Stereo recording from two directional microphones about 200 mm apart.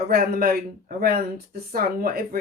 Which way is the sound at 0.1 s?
50° right (ahead or behind).